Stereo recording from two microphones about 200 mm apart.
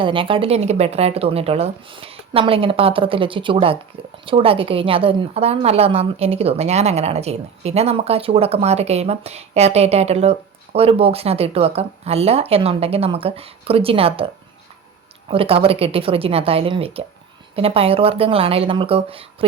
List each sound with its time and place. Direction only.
0.0 s a woman's voice: 25° right (ahead or behind)
15.3 s a woman's voice: 30° right (ahead or behind)